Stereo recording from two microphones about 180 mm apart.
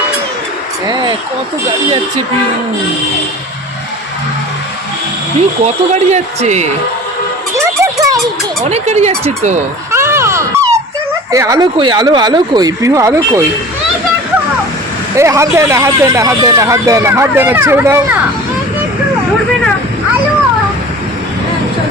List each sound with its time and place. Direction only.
0.9 s a sound: 20° right (ahead or behind)
5.6 s speech: 40° right (ahead or behind)
7.5 s a sound: 20° right (ahead or behind)
8.7 s speech: 35° right (ahead or behind)
9.9 s dog: 15° right (ahead or behind)
11.3 s speech: 20° right (ahead or behind)
15.1 s speech: 15° right (ahead or behind)